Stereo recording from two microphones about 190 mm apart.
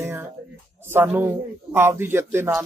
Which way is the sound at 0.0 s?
10° right (ahead or behind).